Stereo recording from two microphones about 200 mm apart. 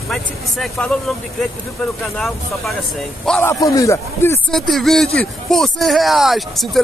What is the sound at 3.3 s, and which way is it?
A man's voice, 10° left (ahead or behind).